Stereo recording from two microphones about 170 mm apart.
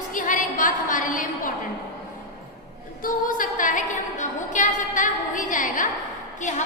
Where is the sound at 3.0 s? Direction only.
55° left (ahead or behind).